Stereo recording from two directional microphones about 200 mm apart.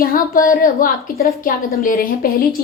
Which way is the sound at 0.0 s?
45° left (ahead or behind).